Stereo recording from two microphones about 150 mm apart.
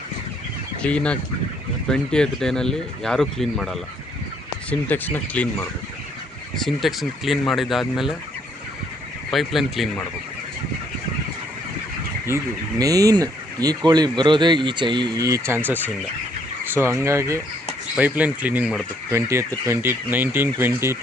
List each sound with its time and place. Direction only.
0.8 s speech: 5° left (ahead or behind)
4.7 s speech: 10° left (ahead or behind)
6.7 s speech: centre (ahead or behind)
9.3 s speech: centre (ahead or behind)
12.3 s speech: 15° right (ahead or behind)